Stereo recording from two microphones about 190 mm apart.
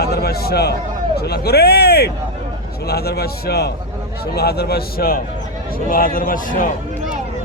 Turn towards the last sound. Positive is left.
turn(degrees=45)  # may be behind; listen again after turning